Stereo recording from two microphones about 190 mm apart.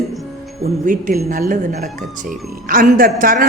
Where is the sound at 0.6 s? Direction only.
45° right (ahead or behind).